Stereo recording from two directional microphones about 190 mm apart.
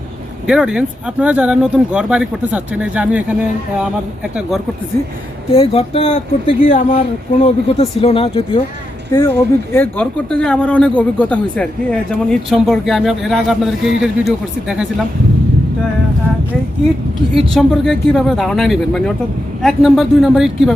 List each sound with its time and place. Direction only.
0.4 s speech: 5° right (ahead or behind)
5.5 s speech: 30° left (ahead or behind)
9.1 s speech: 10° left (ahead or behind)
17.5 s speech: 5° left (ahead or behind)